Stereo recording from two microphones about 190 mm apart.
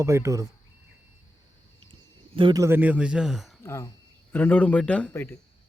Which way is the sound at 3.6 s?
15° left (ahead or behind).